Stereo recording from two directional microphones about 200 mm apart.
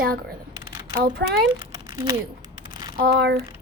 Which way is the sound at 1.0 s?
50° right (ahead or behind).